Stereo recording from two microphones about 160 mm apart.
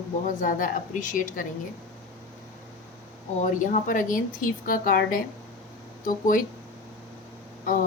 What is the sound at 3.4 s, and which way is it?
A woman's voice, 55° left (ahead or behind).